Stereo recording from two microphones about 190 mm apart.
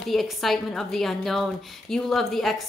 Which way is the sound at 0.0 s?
Centre (ahead or behind).